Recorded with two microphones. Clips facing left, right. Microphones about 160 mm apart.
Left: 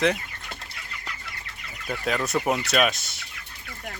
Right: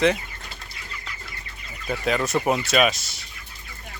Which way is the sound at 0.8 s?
65° left (ahead or behind).